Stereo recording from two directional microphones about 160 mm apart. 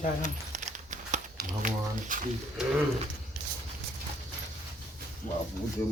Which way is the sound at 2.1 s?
55° right (ahead or behind).